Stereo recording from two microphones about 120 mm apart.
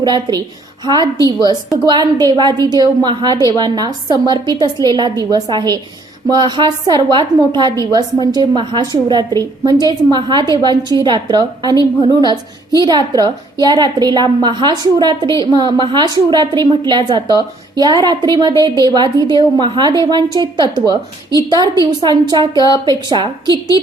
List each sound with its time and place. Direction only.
0.0 s a woman's voice: 35° right (ahead or behind)
22.5 s a woman's voice: 35° left (ahead or behind)
22.9 s a woman's voice: 35° right (ahead or behind)